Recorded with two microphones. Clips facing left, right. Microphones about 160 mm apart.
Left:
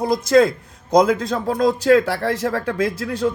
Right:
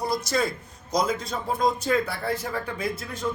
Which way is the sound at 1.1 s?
75° left (ahead or behind).